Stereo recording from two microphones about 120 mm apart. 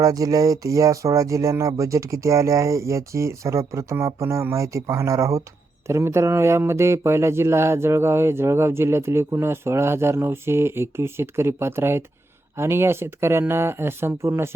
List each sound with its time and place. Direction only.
0.0 s speech: 30° right (ahead or behind)